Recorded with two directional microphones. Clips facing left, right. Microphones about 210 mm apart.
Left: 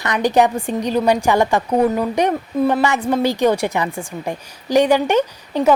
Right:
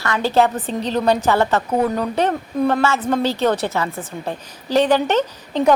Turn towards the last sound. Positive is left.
turn(degrees=10)  # may be behind; listen again after turning